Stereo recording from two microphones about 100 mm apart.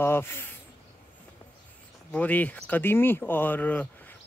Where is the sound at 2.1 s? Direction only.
15° left (ahead or behind).